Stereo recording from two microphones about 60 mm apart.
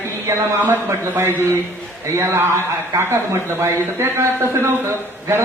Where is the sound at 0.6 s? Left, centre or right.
Right.